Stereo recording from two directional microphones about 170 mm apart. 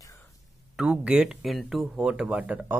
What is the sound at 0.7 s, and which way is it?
Speech, 5° right (ahead or behind).